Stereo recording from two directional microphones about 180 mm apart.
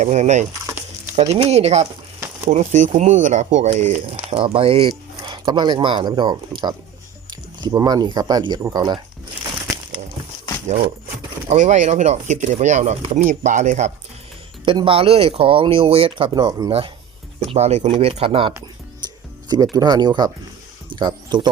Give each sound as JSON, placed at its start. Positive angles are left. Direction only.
{"t": 0.0, "sound": "speech", "side_deg": -40}
{"t": 11.4, "sound": "speech", "side_deg": -40}
{"t": 14.6, "sound": "speech", "side_deg": -30}
{"t": 17.4, "sound": "speech", "side_deg": -35}
{"t": 19.0, "sound": "music", "side_deg": -20}
{"t": 19.7, "sound": "speech", "side_deg": -25}